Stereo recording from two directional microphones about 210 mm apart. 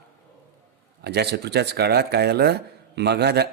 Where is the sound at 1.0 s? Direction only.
50° right (ahead or behind).